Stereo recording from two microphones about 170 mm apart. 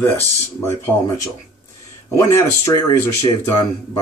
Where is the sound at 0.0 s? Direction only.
15° left (ahead or behind).